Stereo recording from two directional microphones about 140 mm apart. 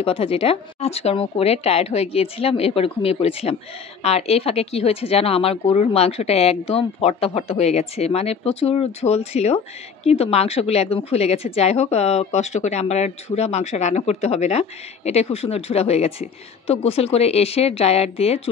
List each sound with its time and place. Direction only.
0.0 s a woman's voice: 45° left (ahead or behind)